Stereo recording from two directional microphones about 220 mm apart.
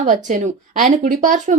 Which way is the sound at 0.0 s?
35° right (ahead or behind).